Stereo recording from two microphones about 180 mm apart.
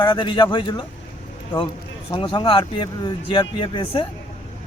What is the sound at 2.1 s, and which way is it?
Speech, 30° left (ahead or behind).